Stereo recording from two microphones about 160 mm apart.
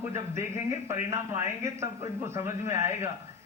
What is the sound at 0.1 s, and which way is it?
A man's voice, 15° right (ahead or behind).